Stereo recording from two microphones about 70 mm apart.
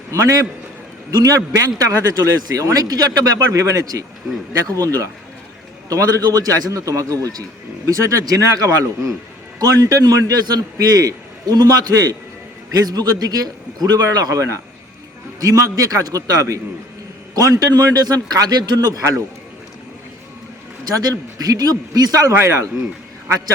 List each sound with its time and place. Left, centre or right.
0.1 s speech: right
8.6 s a man's voice: right
10.8 s a man's voice: right
20.8 s speech: right
22.4 s speech: right